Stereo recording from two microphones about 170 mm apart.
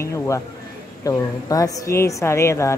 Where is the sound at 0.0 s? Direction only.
15° left (ahead or behind).